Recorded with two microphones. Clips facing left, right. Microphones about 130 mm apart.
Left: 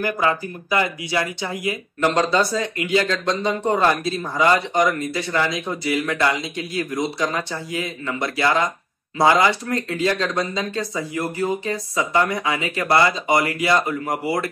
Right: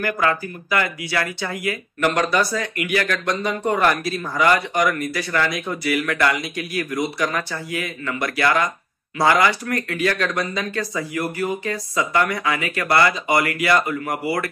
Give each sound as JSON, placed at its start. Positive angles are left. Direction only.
{"t": 0.0, "sound": "speech", "side_deg": 20}